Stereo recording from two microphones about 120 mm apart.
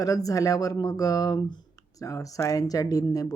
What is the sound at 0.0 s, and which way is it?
Speech, 30° left (ahead or behind).